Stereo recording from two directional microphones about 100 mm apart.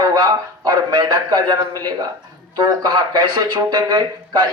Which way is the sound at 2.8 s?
45° right (ahead or behind).